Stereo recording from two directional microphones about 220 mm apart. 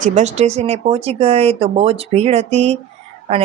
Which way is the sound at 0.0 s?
30° right (ahead or behind).